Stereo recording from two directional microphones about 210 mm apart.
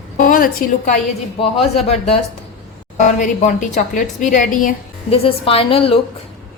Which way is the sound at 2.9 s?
35° left (ahead or behind).